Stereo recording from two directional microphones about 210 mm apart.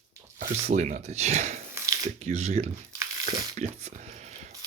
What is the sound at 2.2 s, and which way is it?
Speech, 30° right (ahead or behind).